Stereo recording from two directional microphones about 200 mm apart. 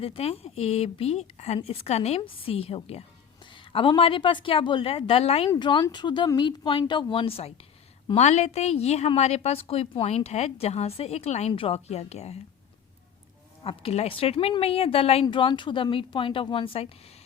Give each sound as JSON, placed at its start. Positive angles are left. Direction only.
{"t": 0.0, "sound": "a woman's voice", "side_deg": 30}
{"t": 13.7, "sound": "a woman's voice", "side_deg": 30}